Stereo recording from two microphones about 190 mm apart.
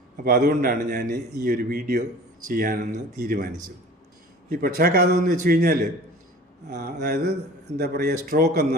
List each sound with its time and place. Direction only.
0.3 s a man's voice: 50° right (ahead or behind)
4.4 s a man's voice: 50° right (ahead or behind)